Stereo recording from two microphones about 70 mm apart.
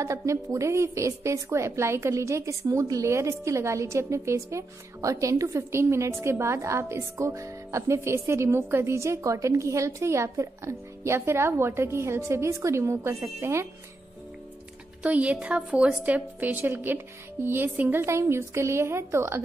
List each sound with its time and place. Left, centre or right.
0.0 s a woman's voice: right
15.0 s a woman's voice: centre
18.0 s a woman's voice: right